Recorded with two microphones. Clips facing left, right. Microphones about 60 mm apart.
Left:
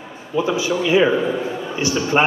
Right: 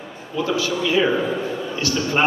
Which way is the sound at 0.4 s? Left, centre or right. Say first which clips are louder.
Left 2 dB; centre.